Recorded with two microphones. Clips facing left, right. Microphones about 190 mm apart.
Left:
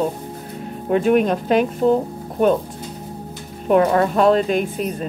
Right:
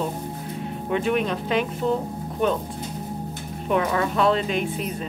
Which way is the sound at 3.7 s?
45° left (ahead or behind).